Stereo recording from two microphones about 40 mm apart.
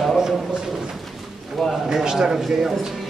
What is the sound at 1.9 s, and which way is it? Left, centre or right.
Speech, centre.